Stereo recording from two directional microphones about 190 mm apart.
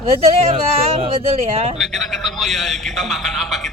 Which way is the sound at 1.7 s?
Centre (ahead or behind).